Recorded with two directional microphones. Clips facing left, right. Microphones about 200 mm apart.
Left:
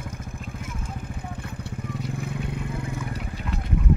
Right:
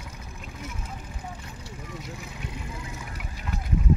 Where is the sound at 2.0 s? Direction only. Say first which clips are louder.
Left 8 dB; 55° left (ahead or behind).